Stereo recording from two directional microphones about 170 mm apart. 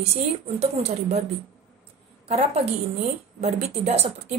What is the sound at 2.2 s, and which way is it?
Speech, 40° right (ahead or behind).